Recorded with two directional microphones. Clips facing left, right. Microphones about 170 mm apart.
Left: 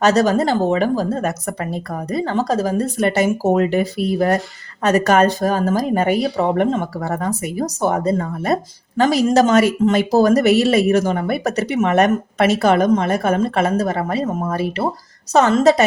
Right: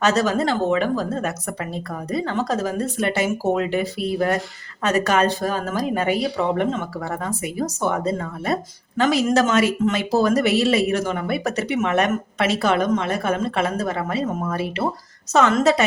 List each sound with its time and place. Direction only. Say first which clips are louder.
0.0 s speech: left 4 dB; 40° left (ahead or behind)